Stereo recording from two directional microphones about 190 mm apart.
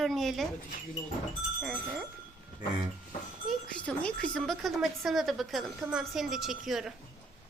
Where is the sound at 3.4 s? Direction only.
5° left (ahead or behind).